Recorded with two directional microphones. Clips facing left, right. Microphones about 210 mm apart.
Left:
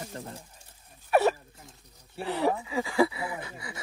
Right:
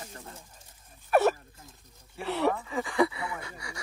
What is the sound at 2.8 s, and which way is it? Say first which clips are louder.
Speech: left 1 dB; 30° left (ahead or behind).